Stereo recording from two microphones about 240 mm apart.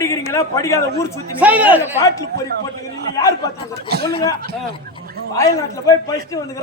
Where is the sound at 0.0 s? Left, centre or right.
Centre.